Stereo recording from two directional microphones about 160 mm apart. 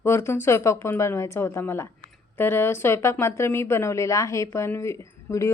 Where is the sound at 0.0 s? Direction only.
15° left (ahead or behind).